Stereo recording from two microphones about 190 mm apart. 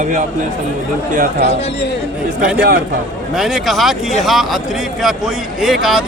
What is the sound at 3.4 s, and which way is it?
Speech, centre (ahead or behind).